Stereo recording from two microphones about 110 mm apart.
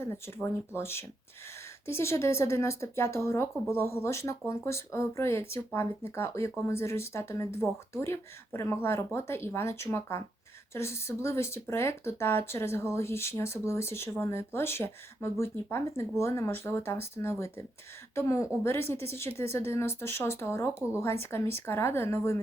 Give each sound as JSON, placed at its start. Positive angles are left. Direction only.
{"t": 0.0, "sound": "speech", "side_deg": 20}